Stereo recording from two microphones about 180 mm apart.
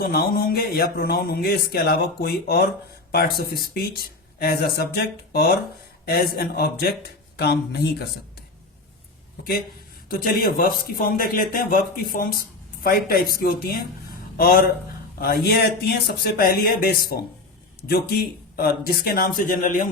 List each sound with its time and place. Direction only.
0.0 s a man's voice: 55° left (ahead or behind)
10.1 s a man's voice: 55° left (ahead or behind)